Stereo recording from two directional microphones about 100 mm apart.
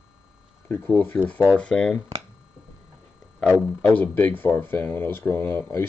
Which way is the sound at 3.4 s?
10° left (ahead or behind).